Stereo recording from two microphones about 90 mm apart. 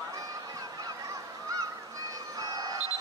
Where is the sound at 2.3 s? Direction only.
45° right (ahead or behind).